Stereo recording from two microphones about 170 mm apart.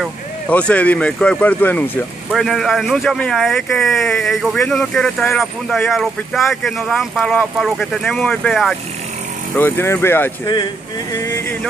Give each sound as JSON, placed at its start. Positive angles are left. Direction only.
{"t": 0.5, "sound": "speech", "side_deg": 5}
{"t": 2.4, "sound": "speech", "side_deg": 0}
{"t": 9.6, "sound": "speech", "side_deg": 15}